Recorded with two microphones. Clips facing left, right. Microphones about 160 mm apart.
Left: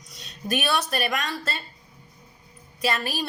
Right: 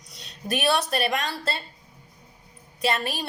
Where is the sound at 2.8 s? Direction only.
25° right (ahead or behind).